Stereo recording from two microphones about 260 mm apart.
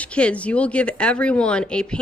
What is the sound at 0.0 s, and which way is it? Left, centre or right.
A woman's voice, centre.